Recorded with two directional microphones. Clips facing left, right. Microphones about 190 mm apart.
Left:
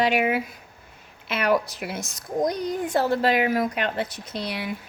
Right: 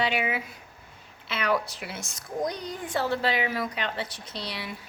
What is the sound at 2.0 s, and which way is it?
Speech, 40° left (ahead or behind).